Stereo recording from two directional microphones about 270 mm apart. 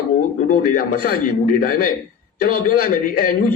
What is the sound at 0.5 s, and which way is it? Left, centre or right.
A man's voice, left.